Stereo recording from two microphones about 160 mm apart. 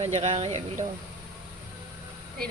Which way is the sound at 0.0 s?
40° right (ahead or behind).